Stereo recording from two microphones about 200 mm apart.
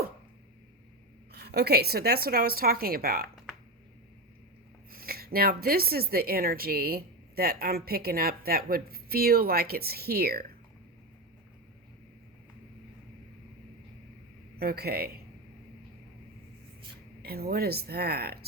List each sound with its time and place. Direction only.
1.4 s speech: 55° right (ahead or behind)
4.9 s speech: 50° right (ahead or behind)
14.6 s speech: 50° right (ahead or behind)
17.2 s speech: 50° right (ahead or behind)